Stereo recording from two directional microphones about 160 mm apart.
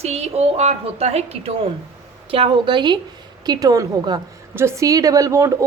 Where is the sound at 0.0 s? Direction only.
40° right (ahead or behind).